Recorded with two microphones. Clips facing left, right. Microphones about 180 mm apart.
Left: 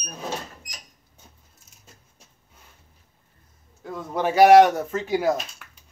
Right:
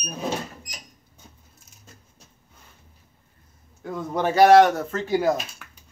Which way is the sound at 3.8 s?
Centre (ahead or behind).